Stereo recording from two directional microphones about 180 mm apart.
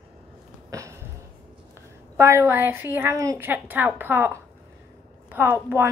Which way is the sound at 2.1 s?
15° right (ahead or behind).